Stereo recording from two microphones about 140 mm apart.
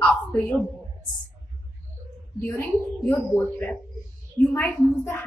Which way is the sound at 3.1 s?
10° left (ahead or behind).